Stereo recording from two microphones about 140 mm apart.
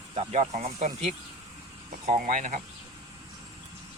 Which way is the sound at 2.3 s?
70° right (ahead or behind).